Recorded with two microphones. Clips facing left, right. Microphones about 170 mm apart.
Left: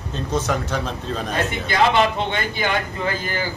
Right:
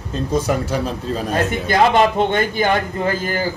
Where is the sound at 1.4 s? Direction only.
45° right (ahead or behind).